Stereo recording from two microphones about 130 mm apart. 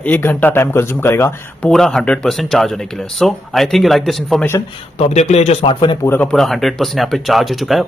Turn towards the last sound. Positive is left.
turn(degrees=0)  # may be behind; listen again after turning